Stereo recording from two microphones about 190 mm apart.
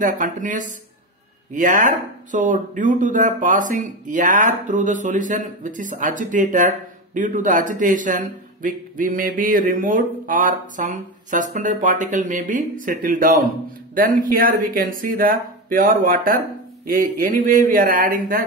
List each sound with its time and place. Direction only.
0.0 s a man's voice: 45° right (ahead or behind)